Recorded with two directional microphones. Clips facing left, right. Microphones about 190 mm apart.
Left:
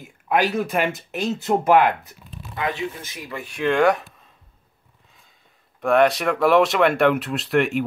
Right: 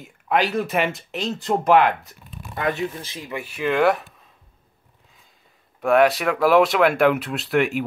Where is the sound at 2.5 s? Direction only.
45° right (ahead or behind).